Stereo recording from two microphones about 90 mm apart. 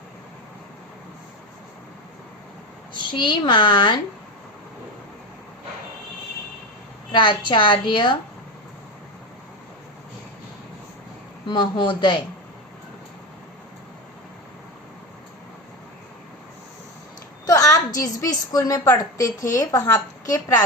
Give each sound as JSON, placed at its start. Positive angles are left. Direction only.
{"t": 2.9, "sound": "a woman's voice", "side_deg": 60}
{"t": 7.1, "sound": "a woman's voice", "side_deg": 60}
{"t": 11.4, "sound": "a woman's voice", "side_deg": 60}
{"t": 17.4, "sound": "a woman's voice", "side_deg": 40}